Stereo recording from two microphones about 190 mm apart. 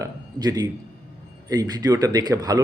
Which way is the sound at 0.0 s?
20° right (ahead or behind).